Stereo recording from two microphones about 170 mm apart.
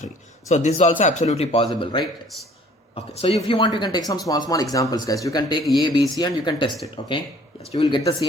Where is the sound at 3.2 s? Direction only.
30° left (ahead or behind).